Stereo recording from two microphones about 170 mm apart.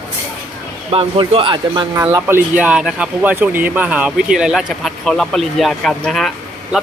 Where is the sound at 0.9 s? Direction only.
30° right (ahead or behind).